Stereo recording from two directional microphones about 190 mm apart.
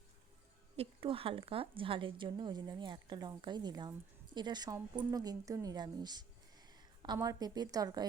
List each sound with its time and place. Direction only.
0.8 s a woman's voice: 30° right (ahead or behind)